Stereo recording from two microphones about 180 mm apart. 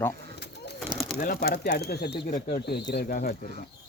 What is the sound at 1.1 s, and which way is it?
Speech, 55° left (ahead or behind).